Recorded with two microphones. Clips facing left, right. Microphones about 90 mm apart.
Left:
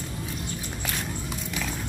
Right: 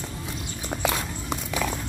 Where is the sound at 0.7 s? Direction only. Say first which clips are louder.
Right 9 dB; 70° right (ahead or behind).